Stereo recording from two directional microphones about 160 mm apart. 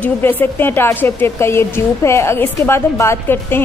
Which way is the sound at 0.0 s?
10° left (ahead or behind).